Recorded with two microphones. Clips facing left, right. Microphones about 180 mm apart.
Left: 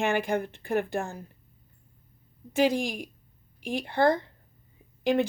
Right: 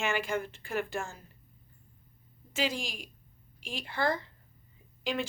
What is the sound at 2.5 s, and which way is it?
Speech, 55° left (ahead or behind).